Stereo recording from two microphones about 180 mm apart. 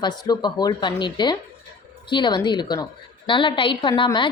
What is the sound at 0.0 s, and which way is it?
A woman's voice, 25° left (ahead or behind).